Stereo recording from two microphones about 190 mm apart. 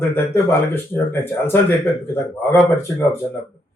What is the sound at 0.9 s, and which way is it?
Speech, 10° left (ahead or behind).